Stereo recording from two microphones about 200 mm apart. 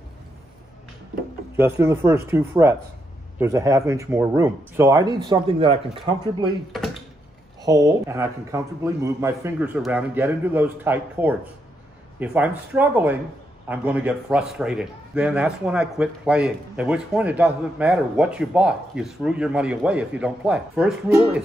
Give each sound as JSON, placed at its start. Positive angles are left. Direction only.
{"t": 1.6, "sound": "a man's voice", "side_deg": -10}
{"t": 7.6, "sound": "a man's voice", "side_deg": -15}